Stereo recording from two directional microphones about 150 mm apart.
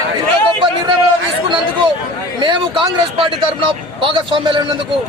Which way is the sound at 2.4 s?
30° right (ahead or behind).